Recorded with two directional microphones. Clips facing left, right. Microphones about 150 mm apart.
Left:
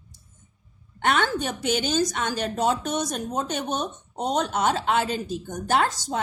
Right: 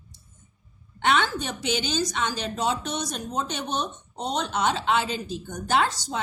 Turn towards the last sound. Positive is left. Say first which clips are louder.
# left 1 dB
turn(degrees=50)  # may be behind; listen again after turning